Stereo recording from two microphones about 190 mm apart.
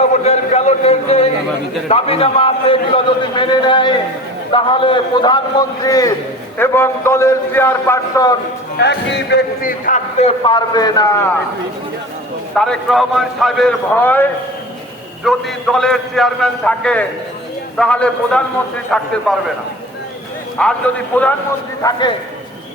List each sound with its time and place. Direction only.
0.0 s a man's voice: 35° left (ahead or behind); by 8.4 s 15° left (ahead or behind)
8.8 s a man's voice: 60° left (ahead or behind); by 10.3 s 40° left (ahead or behind)
10.4 s a man's voice: 20° left (ahead or behind)
12.5 s a man's voice: centre (ahead or behind)
20.6 s a man's voice: 5° left (ahead or behind)
21.8 s a man's voice: 25° left (ahead or behind)